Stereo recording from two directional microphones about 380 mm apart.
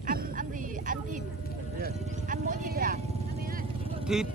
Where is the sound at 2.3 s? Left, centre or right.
Centre.